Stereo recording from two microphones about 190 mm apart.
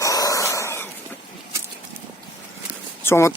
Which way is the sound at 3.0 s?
15° left (ahead or behind).